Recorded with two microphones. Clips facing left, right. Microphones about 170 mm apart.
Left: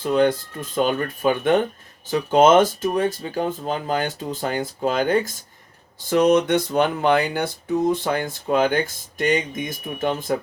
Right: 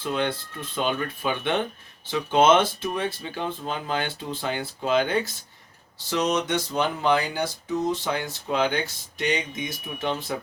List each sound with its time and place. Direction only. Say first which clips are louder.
0.0 s speech: left 8 dB; 40° left (ahead or behind)